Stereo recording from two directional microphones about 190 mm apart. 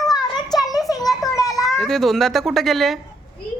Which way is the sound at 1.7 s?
Centre (ahead or behind).